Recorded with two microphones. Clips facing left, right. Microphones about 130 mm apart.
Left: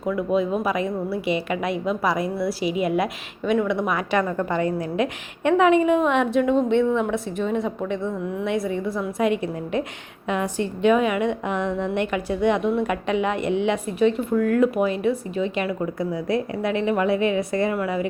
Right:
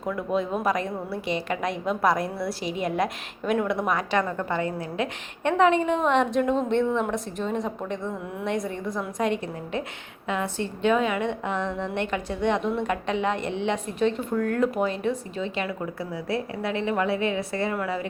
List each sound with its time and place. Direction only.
0.0 s a woman's voice: centre (ahead or behind)